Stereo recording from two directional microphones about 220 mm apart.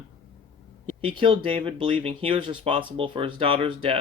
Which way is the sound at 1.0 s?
25° right (ahead or behind).